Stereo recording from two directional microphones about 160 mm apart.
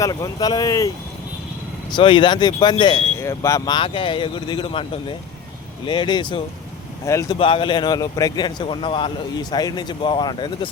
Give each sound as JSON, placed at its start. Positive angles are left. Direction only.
{"t": 0.0, "sound": "speech", "side_deg": 25}
{"t": 1.9, "sound": "speech", "side_deg": 30}
{"t": 3.2, "sound": "speech", "side_deg": 20}
{"t": 3.8, "sound": "speech", "side_deg": 35}
{"t": 7.0, "sound": "speech", "side_deg": 20}
{"t": 7.3, "sound": "speech", "side_deg": 35}